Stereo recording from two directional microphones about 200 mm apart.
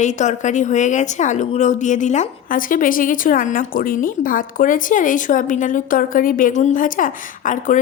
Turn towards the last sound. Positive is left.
turn(degrees=40)  # may be behind; listen again after turning